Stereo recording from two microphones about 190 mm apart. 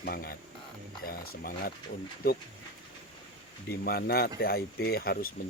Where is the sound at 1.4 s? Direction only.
50° left (ahead or behind).